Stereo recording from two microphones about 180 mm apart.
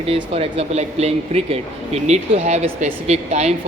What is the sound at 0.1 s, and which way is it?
A man's voice, 35° right (ahead or behind).